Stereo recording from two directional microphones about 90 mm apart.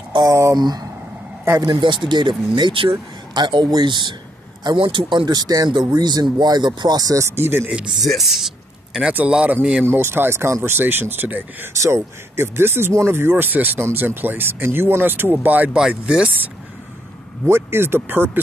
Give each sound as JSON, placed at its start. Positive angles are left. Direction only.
{"t": 0.3, "sound": "speech", "side_deg": -35}
{"t": 0.6, "sound": "speech", "side_deg": -50}
{"t": 1.7, "sound": "speech", "side_deg": -65}
{"t": 7.3, "sound": "speech", "side_deg": -25}
{"t": 7.7, "sound": "speech", "side_deg": -10}
{"t": 8.0, "sound": "speech", "side_deg": 0}
{"t": 9.1, "sound": "speech", "side_deg": -15}
{"t": 11.7, "sound": "speech", "side_deg": -30}
{"t": 17.5, "sound": "speech", "side_deg": -25}